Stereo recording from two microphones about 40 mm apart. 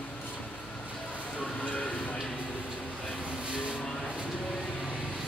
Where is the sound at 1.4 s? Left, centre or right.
Left.